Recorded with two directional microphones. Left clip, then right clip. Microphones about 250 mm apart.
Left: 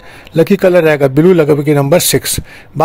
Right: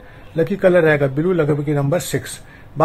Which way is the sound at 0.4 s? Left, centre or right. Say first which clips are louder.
Left 6 dB; left.